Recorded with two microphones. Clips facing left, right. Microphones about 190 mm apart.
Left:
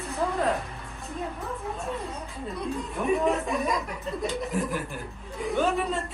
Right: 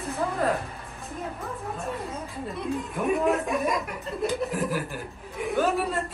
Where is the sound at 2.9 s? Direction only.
Centre (ahead or behind).